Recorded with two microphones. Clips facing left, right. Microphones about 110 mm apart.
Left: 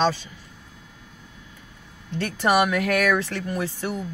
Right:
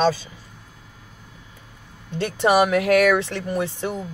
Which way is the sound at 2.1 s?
15° right (ahead or behind).